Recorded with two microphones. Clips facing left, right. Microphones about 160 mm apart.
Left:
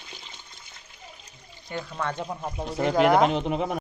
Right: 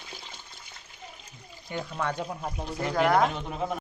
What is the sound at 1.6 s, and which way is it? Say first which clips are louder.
Speech: even; 10° right (ahead or behind).